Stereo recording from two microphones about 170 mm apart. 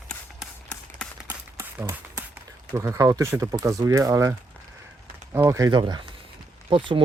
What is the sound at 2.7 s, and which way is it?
Speech, 15° right (ahead or behind).